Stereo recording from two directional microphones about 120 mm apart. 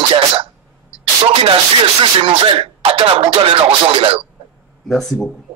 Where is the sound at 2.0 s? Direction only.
50° right (ahead or behind).